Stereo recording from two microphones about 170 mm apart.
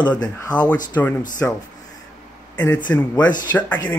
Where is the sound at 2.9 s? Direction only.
25° left (ahead or behind).